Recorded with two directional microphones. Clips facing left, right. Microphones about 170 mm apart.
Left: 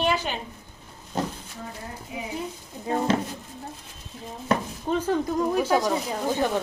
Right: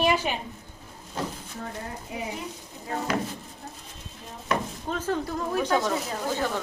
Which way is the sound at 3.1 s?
25° left (ahead or behind).